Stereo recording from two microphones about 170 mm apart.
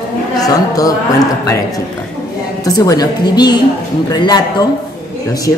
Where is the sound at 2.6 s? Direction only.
20° left (ahead or behind).